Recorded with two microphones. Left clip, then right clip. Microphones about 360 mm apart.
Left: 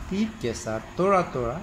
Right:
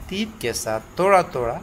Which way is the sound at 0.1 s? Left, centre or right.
Right.